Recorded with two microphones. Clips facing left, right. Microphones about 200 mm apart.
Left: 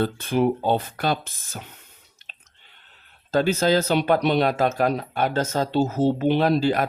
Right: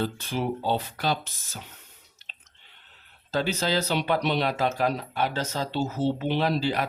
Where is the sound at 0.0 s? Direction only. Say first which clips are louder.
Left 7 dB; 55° left (ahead or behind).